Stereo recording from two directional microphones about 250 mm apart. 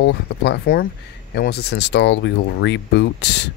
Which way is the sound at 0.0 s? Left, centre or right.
Left.